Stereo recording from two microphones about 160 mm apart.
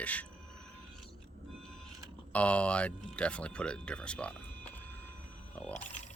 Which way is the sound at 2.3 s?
10° left (ahead or behind).